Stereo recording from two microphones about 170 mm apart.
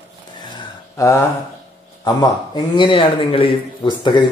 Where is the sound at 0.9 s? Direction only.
20° left (ahead or behind).